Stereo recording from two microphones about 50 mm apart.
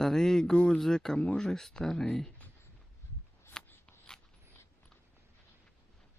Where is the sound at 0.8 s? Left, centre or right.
Centre.